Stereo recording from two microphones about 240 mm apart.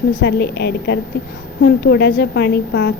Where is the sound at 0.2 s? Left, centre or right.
Left.